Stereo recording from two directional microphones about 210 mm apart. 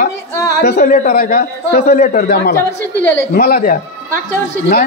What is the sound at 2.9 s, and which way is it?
Speech, 10° left (ahead or behind).